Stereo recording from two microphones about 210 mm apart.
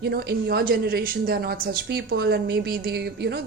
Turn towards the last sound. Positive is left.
turn(degrees=-50)  # may be behind; listen again after turning